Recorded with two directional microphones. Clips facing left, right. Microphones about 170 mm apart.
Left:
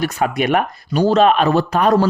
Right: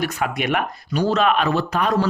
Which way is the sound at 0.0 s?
35° left (ahead or behind).